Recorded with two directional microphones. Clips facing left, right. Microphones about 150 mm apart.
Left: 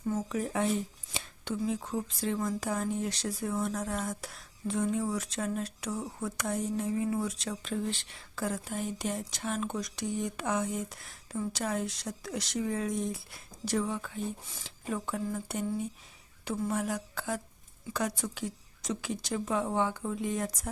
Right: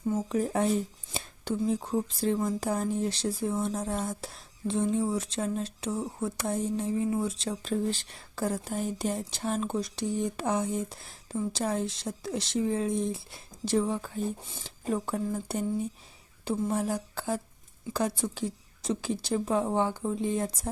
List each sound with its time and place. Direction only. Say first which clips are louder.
0.3 s speech: right 5 dB; 35° right (ahead or behind)